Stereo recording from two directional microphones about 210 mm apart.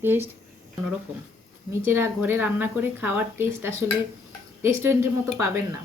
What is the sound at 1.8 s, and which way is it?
A woman's voice, 10° right (ahead or behind).